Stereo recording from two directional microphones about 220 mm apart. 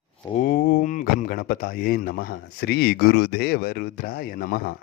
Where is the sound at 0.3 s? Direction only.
40° left (ahead or behind).